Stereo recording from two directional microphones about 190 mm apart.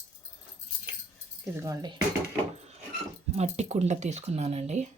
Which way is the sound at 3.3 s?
35° right (ahead or behind).